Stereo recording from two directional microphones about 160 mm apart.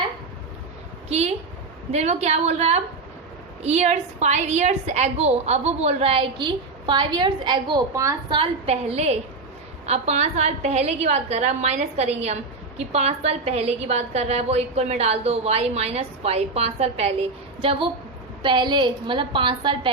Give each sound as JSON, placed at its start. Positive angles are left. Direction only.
{"t": 1.0, "sound": "a woman's voice", "side_deg": -40}
{"t": 8.4, "sound": "a woman's voice", "side_deg": -40}